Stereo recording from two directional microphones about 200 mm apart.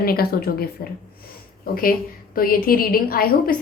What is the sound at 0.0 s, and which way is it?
Speech, 50° left (ahead or behind).